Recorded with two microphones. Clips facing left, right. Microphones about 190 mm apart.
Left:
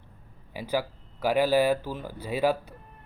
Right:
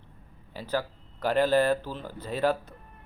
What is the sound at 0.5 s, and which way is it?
Speech, 10° left (ahead or behind).